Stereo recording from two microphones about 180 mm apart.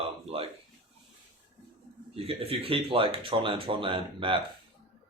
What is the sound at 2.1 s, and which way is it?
Speech, 35° right (ahead or behind).